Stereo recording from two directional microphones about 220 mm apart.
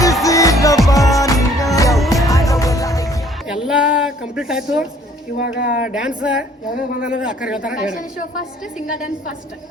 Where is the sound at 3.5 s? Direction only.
5° right (ahead or behind).